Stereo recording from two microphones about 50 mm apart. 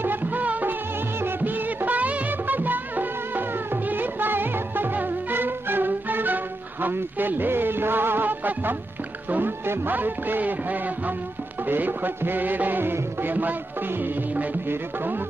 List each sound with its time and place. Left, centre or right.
0.0 s music: right
1.2 s music of bollywood: right
9.7 s music: right